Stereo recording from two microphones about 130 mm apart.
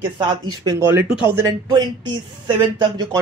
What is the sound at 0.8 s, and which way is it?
Speech, 20° right (ahead or behind).